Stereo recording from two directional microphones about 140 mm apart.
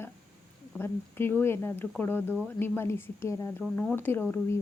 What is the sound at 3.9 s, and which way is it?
Speech, 15° left (ahead or behind).